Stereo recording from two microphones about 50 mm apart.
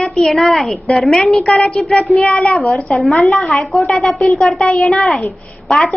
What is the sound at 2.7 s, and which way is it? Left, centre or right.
A woman's voice, centre.